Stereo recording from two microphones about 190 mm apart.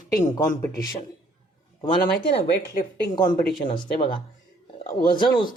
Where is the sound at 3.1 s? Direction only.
25° left (ahead or behind).